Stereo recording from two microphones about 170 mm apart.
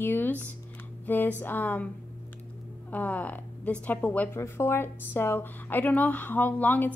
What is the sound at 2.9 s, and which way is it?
A woman's voice, 10° left (ahead or behind).